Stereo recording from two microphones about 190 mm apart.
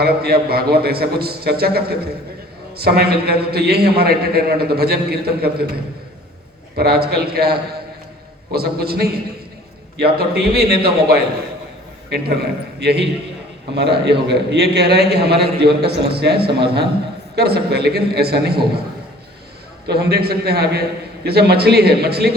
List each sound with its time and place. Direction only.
0.0 s a man's voice: 55° right (ahead or behind)
6.7 s a man's voice: 55° right (ahead or behind)
19.9 s a man's voice: 55° right (ahead or behind)